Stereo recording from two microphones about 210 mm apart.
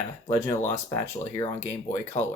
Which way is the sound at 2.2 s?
35° left (ahead or behind).